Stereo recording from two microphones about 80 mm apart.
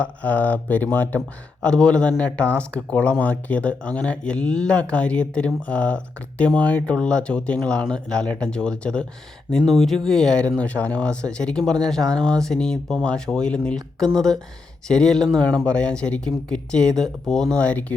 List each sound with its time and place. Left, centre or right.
0.0 s speech: centre
1.6 s speech: centre